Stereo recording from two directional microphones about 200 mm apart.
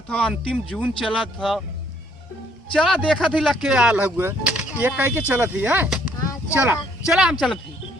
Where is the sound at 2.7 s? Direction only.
5° left (ahead or behind).